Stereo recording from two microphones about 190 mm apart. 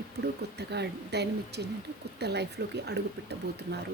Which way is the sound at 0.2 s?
60° right (ahead or behind).